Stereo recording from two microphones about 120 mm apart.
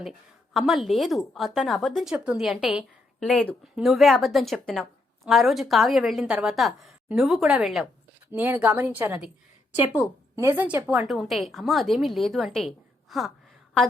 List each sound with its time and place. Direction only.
0.5 s a woman's voice: centre (ahead or behind)
3.2 s a woman's voice: 10° left (ahead or behind)
8.3 s a woman's voice: 15° right (ahead or behind)
10.3 s a woman's voice: 25° right (ahead or behind)
10.6 s a woman's voice: 15° right (ahead or behind)
11.0 s a woman's voice: centre (ahead or behind)